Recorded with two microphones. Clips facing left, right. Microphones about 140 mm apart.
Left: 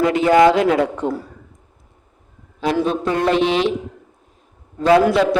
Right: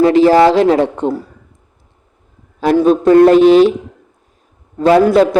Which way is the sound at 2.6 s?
45° right (ahead or behind).